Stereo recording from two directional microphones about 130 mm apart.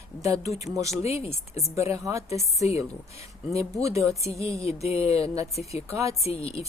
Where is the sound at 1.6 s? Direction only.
20° right (ahead or behind).